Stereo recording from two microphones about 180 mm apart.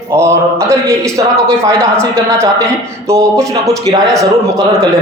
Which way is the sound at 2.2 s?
15° right (ahead or behind).